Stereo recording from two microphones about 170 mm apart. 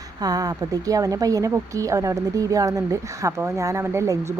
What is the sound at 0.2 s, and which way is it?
Speech, 20° right (ahead or behind).